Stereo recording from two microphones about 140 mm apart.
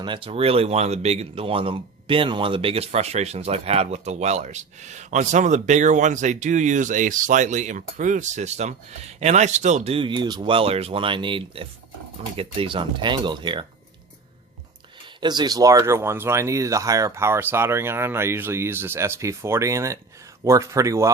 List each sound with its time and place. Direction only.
0.0 s speech: 35° right (ahead or behind)
15.2 s speech: 30° right (ahead or behind)